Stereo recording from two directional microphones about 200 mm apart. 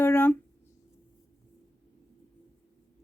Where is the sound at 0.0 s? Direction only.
10° left (ahead or behind).